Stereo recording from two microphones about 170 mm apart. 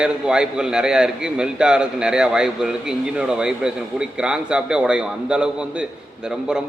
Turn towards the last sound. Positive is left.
turn(degrees=-5)  # may be behind; listen again after turning